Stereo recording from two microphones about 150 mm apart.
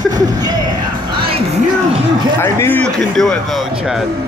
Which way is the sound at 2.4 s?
15° left (ahead or behind).